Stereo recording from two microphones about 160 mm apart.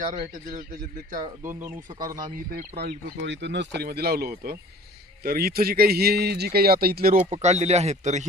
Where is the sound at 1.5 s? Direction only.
10° right (ahead or behind).